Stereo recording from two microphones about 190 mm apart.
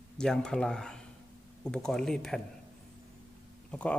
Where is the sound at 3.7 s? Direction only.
5° left (ahead or behind).